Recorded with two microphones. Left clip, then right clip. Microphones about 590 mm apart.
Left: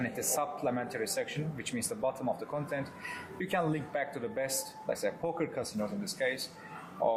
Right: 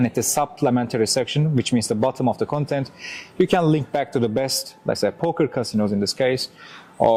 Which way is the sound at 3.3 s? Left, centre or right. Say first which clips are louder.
Right 14 dB; right.